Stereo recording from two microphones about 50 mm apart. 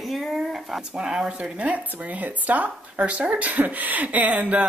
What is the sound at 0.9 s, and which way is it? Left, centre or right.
Speech, centre.